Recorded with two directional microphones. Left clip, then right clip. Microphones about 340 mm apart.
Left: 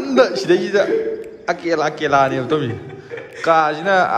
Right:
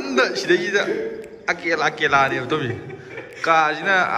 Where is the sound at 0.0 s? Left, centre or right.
Centre.